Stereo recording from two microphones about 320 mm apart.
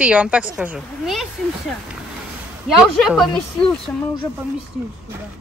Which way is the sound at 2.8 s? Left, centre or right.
Centre.